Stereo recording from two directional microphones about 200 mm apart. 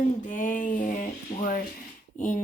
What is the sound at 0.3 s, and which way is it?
Female singing, 40° left (ahead or behind).